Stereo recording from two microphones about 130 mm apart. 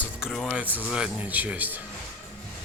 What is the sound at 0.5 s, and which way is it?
Speech, 15° right (ahead or behind).